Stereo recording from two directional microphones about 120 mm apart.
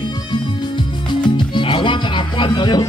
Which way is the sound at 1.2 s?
40° left (ahead or behind).